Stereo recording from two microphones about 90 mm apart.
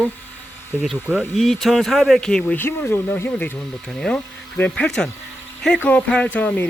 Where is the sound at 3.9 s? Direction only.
10° left (ahead or behind).